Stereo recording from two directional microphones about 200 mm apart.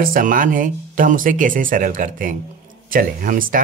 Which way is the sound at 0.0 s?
45° right (ahead or behind).